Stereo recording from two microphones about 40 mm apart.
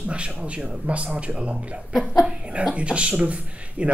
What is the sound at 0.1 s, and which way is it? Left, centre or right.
Speech, right.